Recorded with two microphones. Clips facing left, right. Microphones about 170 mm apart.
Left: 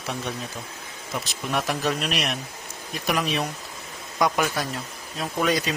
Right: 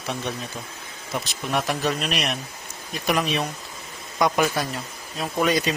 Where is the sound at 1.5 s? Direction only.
Centre (ahead or behind).